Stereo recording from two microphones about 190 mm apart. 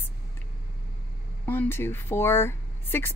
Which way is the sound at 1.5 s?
10° left (ahead or behind).